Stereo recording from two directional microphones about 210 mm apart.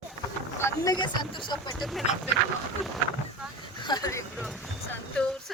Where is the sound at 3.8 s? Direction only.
20° left (ahead or behind).